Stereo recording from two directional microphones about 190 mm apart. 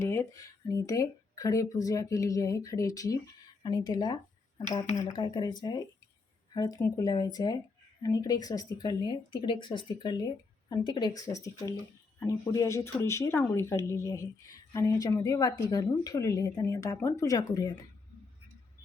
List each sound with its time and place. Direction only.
0.0 s speech: 15° left (ahead or behind)